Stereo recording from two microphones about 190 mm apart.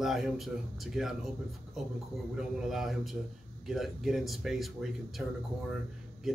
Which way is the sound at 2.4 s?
Centre (ahead or behind).